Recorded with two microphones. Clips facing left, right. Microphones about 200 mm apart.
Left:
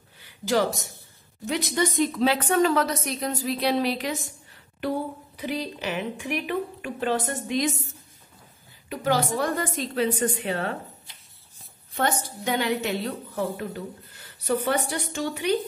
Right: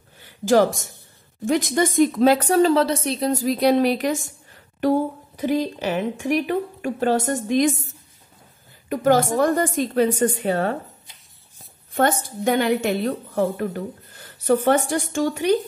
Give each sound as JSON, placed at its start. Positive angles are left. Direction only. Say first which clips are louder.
{"t": 0.2, "sound": "a woman's voice", "louder": "right 7 dB", "side_deg": -50}
{"t": 5.4, "sound": "a woman's voice", "louder": "right 8 dB", "side_deg": -45}
{"t": 8.8, "sound": "a woman's voice", "louder": "right 7 dB", "side_deg": -50}
{"t": 11.9, "sound": "a woman's voice", "louder": "right 6 dB", "side_deg": -50}